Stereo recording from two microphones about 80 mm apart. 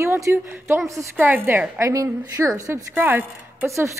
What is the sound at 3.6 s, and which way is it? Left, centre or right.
Speech, right.